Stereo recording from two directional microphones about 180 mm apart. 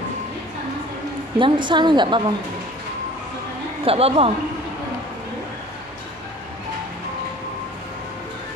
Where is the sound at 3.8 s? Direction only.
35° right (ahead or behind).